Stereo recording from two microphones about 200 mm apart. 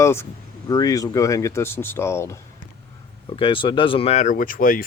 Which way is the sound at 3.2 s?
25° left (ahead or behind).